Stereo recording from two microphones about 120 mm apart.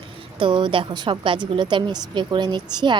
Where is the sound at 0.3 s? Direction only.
45° right (ahead or behind).